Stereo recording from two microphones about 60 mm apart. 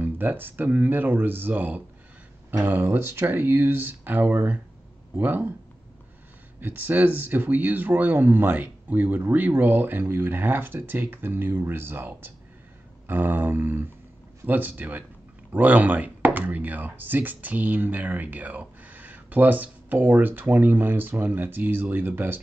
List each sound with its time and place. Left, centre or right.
0.0 s speech: right
2.8 s speech: right
6.6 s speech: right